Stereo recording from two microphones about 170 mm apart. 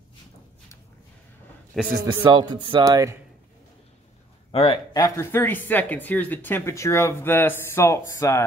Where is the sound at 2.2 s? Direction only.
30° right (ahead or behind).